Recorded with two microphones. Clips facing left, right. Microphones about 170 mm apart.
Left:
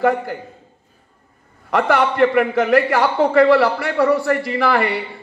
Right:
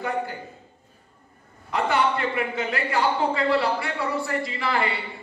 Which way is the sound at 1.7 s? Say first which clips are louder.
Left 6 dB; 75° left (ahead or behind).